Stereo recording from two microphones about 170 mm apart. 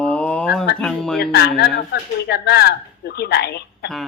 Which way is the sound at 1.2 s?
70° left (ahead or behind).